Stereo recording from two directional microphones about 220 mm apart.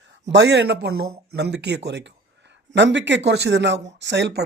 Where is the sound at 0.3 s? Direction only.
50° right (ahead or behind).